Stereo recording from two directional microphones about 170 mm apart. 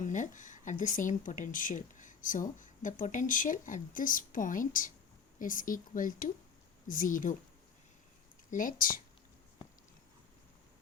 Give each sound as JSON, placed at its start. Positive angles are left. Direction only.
{"t": 0.0, "sound": "speech", "side_deg": 45}
{"t": 8.4, "sound": "speech", "side_deg": 50}